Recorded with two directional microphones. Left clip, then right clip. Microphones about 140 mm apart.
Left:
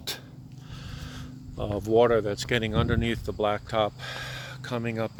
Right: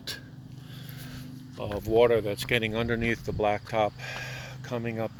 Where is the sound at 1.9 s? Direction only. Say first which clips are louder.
Left 1 dB; 40° left (ahead or behind); by 3.9 s 10° left (ahead or behind).